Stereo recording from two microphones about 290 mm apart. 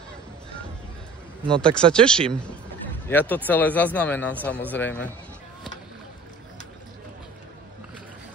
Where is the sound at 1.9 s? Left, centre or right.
Centre.